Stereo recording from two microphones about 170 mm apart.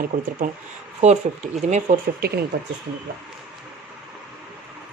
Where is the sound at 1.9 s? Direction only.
45° right (ahead or behind).